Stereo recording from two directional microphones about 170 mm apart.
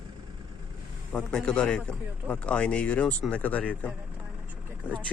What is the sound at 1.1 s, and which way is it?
A man's voice, 5° left (ahead or behind).